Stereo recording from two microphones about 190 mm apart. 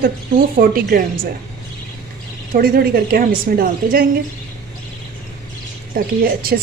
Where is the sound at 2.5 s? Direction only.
50° right (ahead or behind).